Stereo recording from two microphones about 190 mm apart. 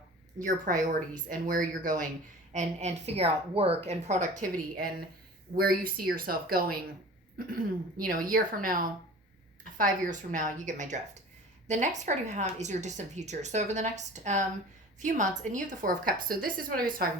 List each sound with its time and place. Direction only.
0.3 s speech: 40° right (ahead or behind)
15.5 s speech: 45° right (ahead or behind)